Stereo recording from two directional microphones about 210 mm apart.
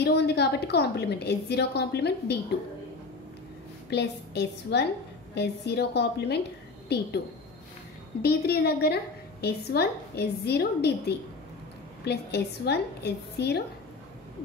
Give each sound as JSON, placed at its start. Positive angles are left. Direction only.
{"t": 0.0, "sound": "a woman's voice", "side_deg": 50}
{"t": 3.9, "sound": "a woman's voice", "side_deg": 50}
{"t": 8.2, "sound": "a woman's voice", "side_deg": 50}